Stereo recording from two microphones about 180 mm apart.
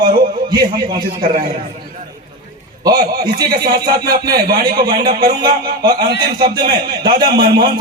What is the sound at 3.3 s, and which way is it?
Speech, 20° right (ahead or behind).